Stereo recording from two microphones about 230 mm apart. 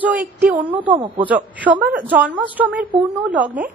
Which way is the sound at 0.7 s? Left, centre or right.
Right.